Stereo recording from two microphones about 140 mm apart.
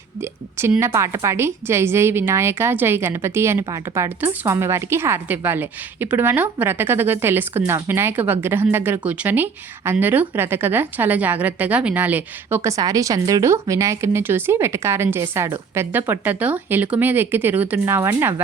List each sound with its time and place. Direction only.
0.2 s a woman's voice: 15° right (ahead or behind)